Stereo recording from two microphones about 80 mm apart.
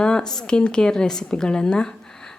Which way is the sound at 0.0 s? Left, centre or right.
Centre.